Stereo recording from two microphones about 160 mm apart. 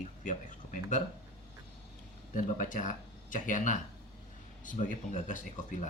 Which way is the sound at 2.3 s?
55° left (ahead or behind).